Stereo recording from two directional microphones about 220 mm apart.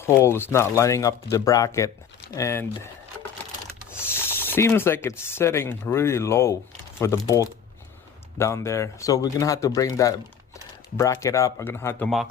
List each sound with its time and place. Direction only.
0.0 s speech: 10° left (ahead or behind)
4.1 s speech: 10° left (ahead or behind)